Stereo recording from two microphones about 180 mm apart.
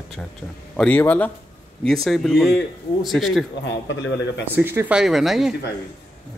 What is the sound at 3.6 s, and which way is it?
Speech, 85° left.